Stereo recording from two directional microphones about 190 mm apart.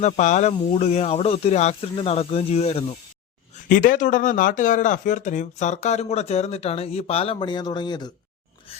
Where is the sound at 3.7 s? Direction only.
45° left (ahead or behind); by 8.1 s 20° left (ahead or behind).